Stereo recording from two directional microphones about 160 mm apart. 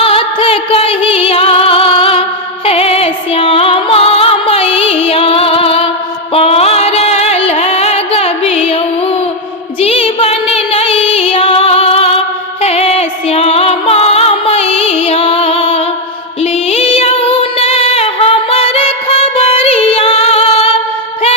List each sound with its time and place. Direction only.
0.0 s music: 35° left (ahead or behind)